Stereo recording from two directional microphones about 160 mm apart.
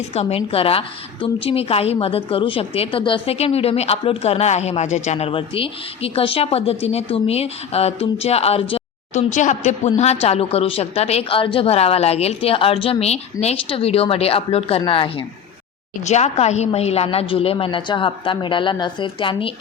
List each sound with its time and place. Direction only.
0.1 s a woman's voice: 40° left (ahead or behind)
16.0 s a woman's voice: 45° left (ahead or behind)